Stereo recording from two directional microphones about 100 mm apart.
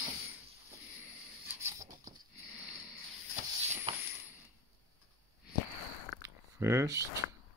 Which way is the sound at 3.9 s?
60° right (ahead or behind).